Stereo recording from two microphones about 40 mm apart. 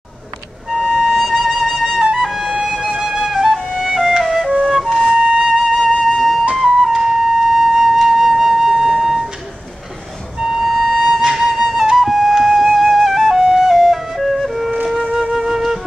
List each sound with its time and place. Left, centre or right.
0.7 s music: centre
2.5 s music: centre
3.0 s flute: centre
3.5 s music: centre
4.6 s flute: centre
5.1 s flute: centre
5.5 s flute: centre
6.1 s music: centre
6.5 s flute: centre
6.9 s flute: centre
10.4 s music: centre
12.0 s flute: centre
13.6 s music: centre
15.3 s flute: centre